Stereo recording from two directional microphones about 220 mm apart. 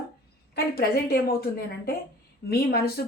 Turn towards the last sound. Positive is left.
turn(degrees=45)  # may be behind; listen again after turning